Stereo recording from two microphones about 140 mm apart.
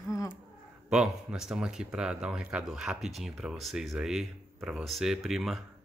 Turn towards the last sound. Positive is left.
turn(degrees=0)  # may be behind; listen again after turning